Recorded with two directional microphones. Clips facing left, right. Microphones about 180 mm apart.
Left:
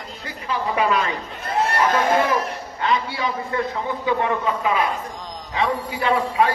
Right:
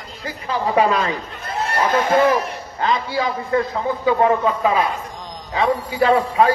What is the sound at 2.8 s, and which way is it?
A man's voice, 35° right (ahead or behind).